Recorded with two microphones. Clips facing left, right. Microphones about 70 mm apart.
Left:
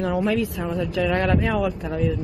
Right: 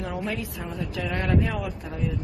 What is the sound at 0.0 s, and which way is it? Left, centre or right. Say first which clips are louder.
Speech: left 8 dB; left.